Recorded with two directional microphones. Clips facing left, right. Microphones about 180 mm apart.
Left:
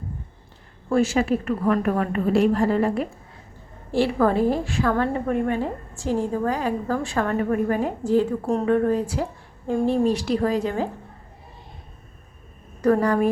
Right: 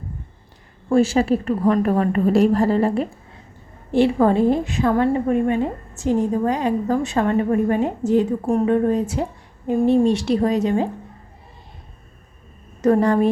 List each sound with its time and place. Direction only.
0.9 s a woman's voice: 30° right (ahead or behind)
12.8 s a woman's voice: 25° right (ahead or behind)